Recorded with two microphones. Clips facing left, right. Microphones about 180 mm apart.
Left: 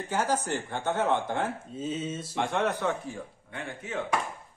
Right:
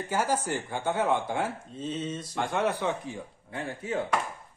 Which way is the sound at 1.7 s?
5° left (ahead or behind).